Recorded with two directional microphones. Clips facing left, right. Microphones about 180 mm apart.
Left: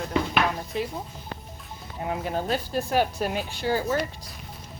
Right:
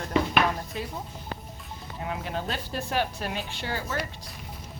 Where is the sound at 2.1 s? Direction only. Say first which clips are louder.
Left 5 dB; 40° left (ahead or behind).